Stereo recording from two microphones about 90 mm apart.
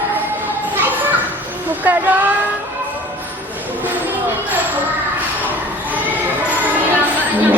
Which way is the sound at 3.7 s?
20° right (ahead or behind).